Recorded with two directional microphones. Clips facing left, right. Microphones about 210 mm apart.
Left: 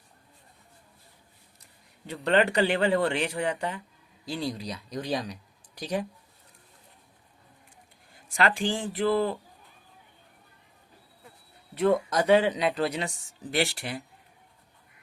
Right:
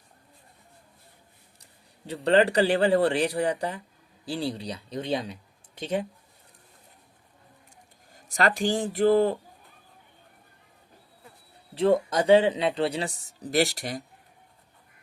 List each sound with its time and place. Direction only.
2.0 s speech: 30° right (ahead or behind)
8.1 s speech: 40° right (ahead or behind)
11.7 s speech: 30° right (ahead or behind)